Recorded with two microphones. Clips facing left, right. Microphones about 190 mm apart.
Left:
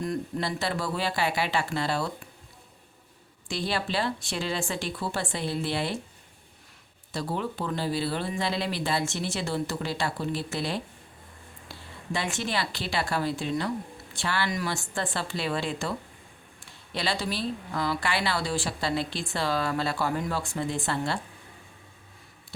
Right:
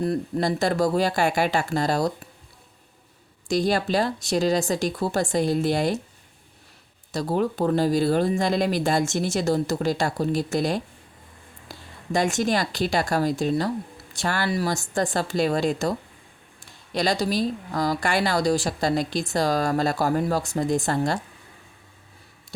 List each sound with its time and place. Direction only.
0.0 s speech: 40° right (ahead or behind)
3.5 s speech: 45° right (ahead or behind)
7.1 s speech: 40° right (ahead or behind)